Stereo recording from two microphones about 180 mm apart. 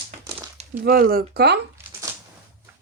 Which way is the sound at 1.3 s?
65° right (ahead or behind).